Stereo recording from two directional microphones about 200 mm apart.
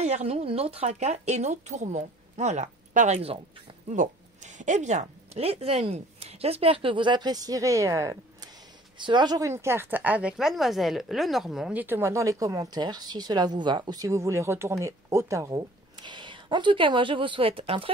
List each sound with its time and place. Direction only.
0.0 s speech: 30° right (ahead or behind)
4.6 s a woman's voice: 35° right (ahead or behind)